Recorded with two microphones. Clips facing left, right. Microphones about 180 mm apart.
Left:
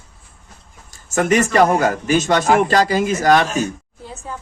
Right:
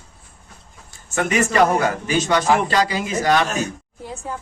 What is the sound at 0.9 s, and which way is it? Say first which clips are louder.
A man's voice: left 6 dB; 40° left (ahead or behind).